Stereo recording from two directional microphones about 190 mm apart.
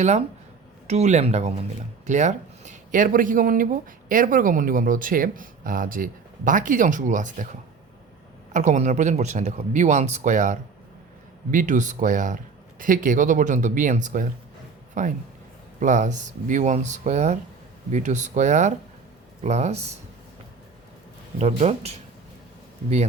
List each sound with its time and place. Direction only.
0.9 s speech: 35° right (ahead or behind)
8.5 s speech: 40° right (ahead or behind)
21.3 s speech: 35° right (ahead or behind)